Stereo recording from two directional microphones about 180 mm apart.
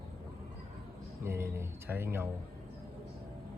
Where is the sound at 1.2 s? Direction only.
15° right (ahead or behind).